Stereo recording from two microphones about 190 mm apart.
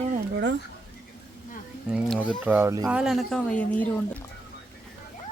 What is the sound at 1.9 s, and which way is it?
Speech, 5° right (ahead or behind).